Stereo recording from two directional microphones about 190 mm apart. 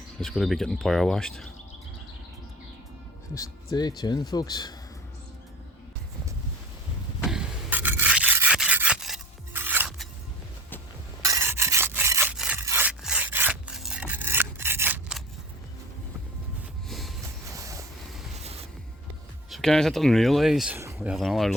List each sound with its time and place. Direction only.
0.2 s speech: centre (ahead or behind)
3.3 s speech: 20° left (ahead or behind)
7.3 s rub: 5° right (ahead or behind)
11.2 s rub: 15° right (ahead or behind)
16.9 s vehicle: centre (ahead or behind)
17.5 s train: 15° right (ahead or behind)
19.5 s speech: centre (ahead or behind)